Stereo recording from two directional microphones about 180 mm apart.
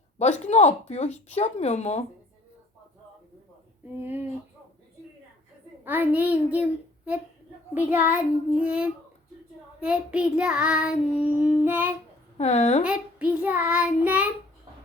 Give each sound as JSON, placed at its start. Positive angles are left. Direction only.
{"t": 0.2, "sound": "speech", "side_deg": 40}
{"t": 4.0, "sound": "child singing", "side_deg": -10}
{"t": 5.8, "sound": "a child's voice", "side_deg": -10}
{"t": 7.7, "sound": "child singing", "side_deg": -10}
{"t": 12.4, "sound": "speech", "side_deg": 40}
{"t": 12.8, "sound": "child singing", "side_deg": -5}